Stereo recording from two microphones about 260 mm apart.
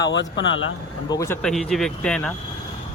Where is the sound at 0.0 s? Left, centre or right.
Left.